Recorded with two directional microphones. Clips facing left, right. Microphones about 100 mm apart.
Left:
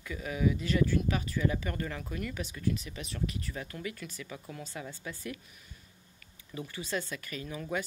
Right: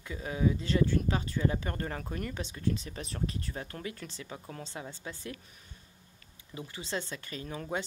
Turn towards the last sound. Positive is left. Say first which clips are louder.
# even
turn(degrees=-30)  # may be behind; listen again after turning